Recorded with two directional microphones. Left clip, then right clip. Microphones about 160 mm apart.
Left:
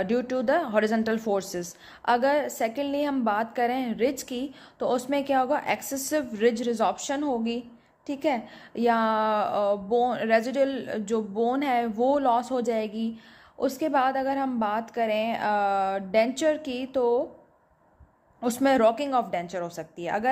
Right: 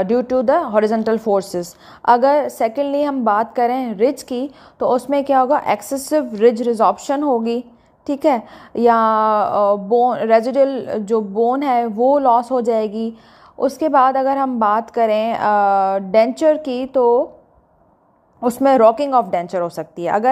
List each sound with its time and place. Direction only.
0.0 s a woman's voice: 5° left (ahead or behind)
1.2 s a woman's voice: 20° right (ahead or behind)
1.5 s a woman's voice: centre (ahead or behind)
7.1 s a woman's voice: 15° right (ahead or behind)
8.1 s a woman's voice: 5° right (ahead or behind)
18.4 s a woman's voice: centre (ahead or behind)